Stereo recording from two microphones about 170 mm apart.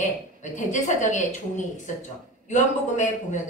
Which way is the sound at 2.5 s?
45° left (ahead or behind).